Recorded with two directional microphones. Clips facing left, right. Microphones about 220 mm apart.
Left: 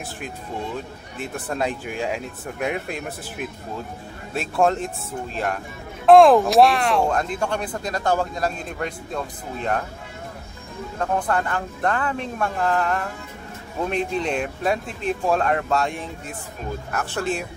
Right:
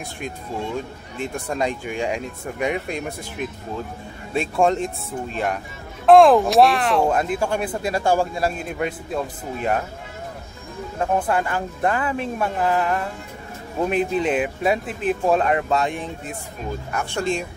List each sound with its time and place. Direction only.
1.1 s speech: 5° left (ahead or behind)
11.0 s speech: 5° right (ahead or behind)